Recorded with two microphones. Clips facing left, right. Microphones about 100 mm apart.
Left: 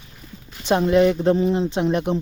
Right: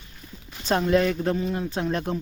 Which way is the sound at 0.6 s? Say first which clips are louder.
Left 5 dB; 15° left (ahead or behind).